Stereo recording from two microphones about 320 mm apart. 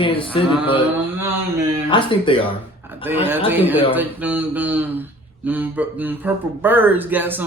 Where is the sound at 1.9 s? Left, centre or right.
Centre.